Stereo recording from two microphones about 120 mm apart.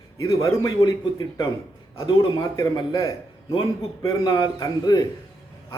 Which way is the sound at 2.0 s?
35° left (ahead or behind).